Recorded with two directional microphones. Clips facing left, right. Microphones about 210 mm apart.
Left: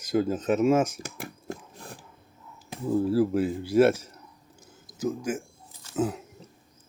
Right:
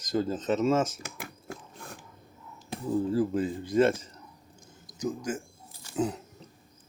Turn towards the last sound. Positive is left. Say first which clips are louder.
# left 2 dB
turn(degrees=5)  # may be behind; listen again after turning